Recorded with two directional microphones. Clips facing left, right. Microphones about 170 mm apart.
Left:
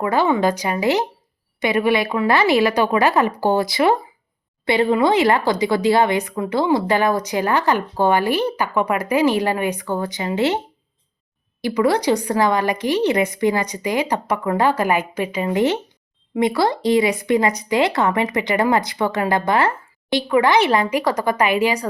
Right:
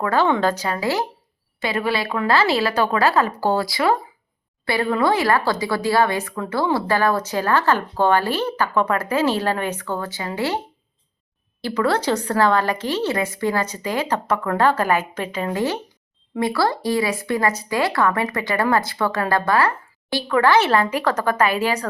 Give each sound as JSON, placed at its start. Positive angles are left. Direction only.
{"t": 0.0, "sound": "speech", "side_deg": 15}
{"t": 11.6, "sound": "speech", "side_deg": 15}